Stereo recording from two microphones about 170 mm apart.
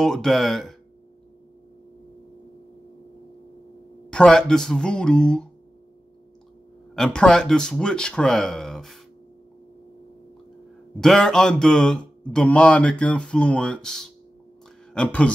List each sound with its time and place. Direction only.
0.0 s speech: centre (ahead or behind)
4.1 s speech: 5° left (ahead or behind)
7.0 s speech: 5° left (ahead or behind)
11.0 s a man's voice: 5° left (ahead or behind)